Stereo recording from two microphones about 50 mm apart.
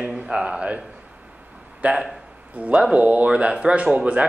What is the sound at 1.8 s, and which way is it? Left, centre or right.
A man's voice, right.